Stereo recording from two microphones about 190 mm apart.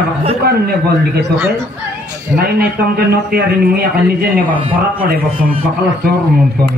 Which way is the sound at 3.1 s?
55° right (ahead or behind).